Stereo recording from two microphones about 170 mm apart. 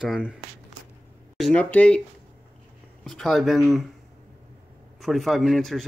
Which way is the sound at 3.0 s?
5° left (ahead or behind).